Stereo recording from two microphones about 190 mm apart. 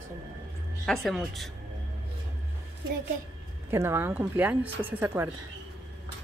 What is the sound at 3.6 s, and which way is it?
Speech, 15° right (ahead or behind).